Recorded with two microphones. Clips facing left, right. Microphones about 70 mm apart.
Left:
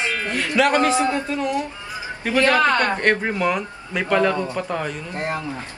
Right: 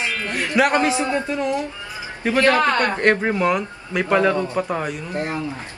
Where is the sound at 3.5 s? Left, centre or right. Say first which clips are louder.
Right 3 dB; centre.